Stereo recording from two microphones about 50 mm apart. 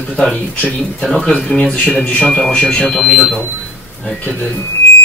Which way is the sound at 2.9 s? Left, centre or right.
Centre.